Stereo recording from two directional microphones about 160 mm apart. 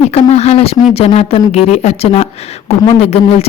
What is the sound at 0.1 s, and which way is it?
A woman's voice, 40° left (ahead or behind).